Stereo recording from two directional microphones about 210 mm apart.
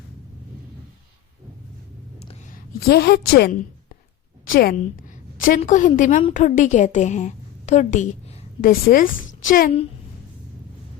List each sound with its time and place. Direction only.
2.8 s a woman's voice: 50° left (ahead or behind)